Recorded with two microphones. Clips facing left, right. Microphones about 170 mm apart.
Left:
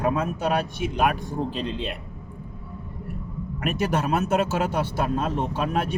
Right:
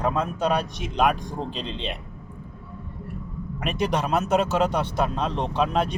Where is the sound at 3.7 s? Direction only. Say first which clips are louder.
Even; 5° left (ahead or behind).